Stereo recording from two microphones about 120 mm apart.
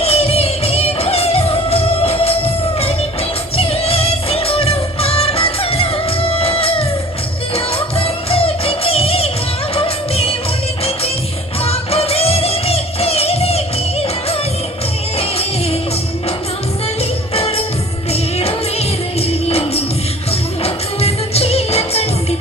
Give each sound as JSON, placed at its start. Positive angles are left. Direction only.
{"t": 0.0, "sound": "music", "side_deg": 55}
{"t": 9.7, "sound": "music of bollywood", "side_deg": 50}
{"t": 11.6, "sound": "music", "side_deg": 55}
{"t": 15.2, "sound": "music", "side_deg": 55}
{"t": 17.0, "sound": "music", "side_deg": 50}